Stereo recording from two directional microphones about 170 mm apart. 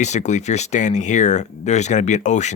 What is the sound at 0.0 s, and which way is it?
Speech, 45° left (ahead or behind).